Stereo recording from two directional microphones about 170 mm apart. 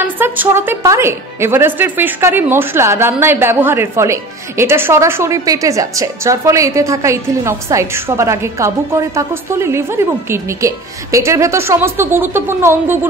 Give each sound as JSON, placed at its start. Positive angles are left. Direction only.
{"t": 0.2, "sound": "speech", "side_deg": -10}